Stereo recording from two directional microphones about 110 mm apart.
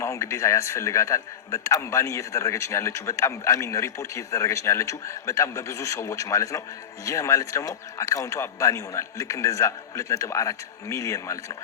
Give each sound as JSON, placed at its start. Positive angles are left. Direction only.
{"t": 0.0, "sound": "a man's voice", "side_deg": 25}